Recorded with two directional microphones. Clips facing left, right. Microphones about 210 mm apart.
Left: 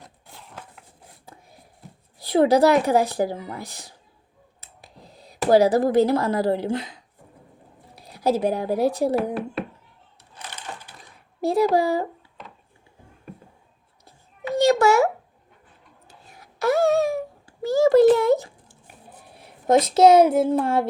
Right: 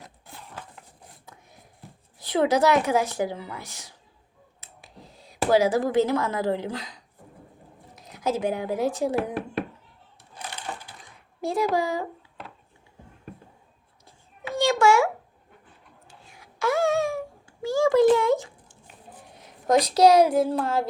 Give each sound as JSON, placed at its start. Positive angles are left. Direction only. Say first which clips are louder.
{"t": 1.2, "sound": "a sound", "louder": "left 3 dB", "side_deg": 30}
{"t": 2.1, "sound": "speech", "louder": "left 5 dB", "side_deg": 35}
{"t": 7.9, "sound": "speech", "louder": "left 5 dB", "side_deg": 35}
{"t": 11.3, "sound": "speech", "louder": "left 5 dB", "side_deg": 35}
{"t": 14.0, "sound": "babbling", "louder": "left 5 dB", "side_deg": 35}
{"t": 16.2, "sound": "a sound", "louder": "left 4 dB", "side_deg": 35}
{"t": 19.4, "sound": "speech", "louder": "left 3 dB", "side_deg": 25}